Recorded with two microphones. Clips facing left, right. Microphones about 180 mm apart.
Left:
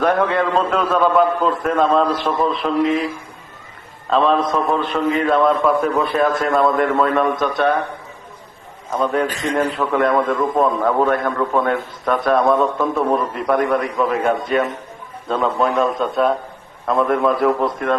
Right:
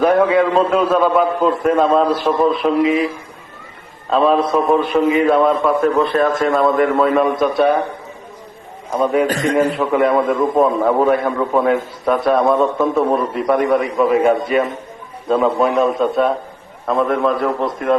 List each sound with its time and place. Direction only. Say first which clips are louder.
0.0 s a man's voice: right 4 dB; 5° right (ahead or behind)
4.1 s a man's voice: right 2 dB; 5° right (ahead or behind)
9.2 s a man's voice: right 5 dB; 45° right (ahead or behind)
9.7 s a man's voice: right 2 dB; 5° right (ahead or behind)